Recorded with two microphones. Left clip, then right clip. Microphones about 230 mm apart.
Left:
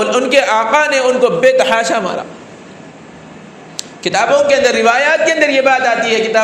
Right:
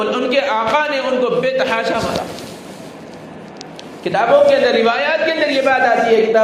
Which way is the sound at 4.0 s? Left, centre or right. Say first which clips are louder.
Even; left.